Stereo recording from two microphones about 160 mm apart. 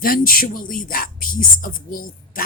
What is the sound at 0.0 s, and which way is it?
Speech, 65° left (ahead or behind).